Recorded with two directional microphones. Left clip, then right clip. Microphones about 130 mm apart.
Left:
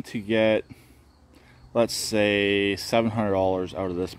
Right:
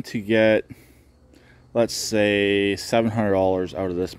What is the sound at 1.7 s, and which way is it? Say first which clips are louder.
Speech: right 2 dB; 25° right (ahead or behind).